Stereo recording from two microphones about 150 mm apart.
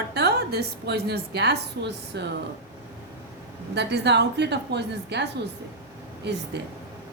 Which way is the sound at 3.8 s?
90° right.